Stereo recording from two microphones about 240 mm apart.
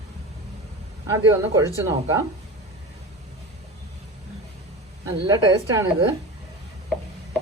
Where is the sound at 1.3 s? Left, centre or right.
Centre.